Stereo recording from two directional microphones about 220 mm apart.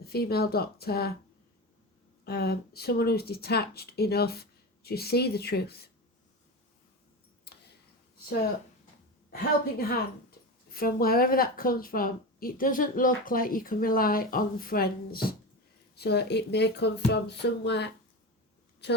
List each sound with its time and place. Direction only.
0.0 s speech: 45° left (ahead or behind)
2.2 s speech: 45° left (ahead or behind)
7.4 s tick: 50° left (ahead or behind)
9.3 s speech: 45° left (ahead or behind)